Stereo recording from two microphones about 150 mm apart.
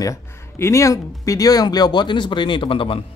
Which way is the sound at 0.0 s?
20° left (ahead or behind).